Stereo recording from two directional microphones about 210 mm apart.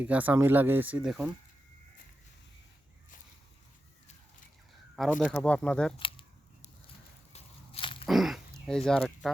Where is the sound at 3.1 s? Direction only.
40° left (ahead or behind).